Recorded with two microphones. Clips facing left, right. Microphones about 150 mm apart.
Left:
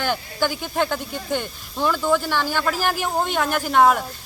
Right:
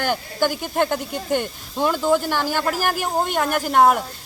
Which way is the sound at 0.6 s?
10° right (ahead or behind).